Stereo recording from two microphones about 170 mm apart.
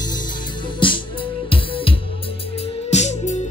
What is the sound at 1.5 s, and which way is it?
Music, 30° left (ahead or behind).